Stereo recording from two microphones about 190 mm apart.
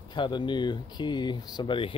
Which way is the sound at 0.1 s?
25° left (ahead or behind).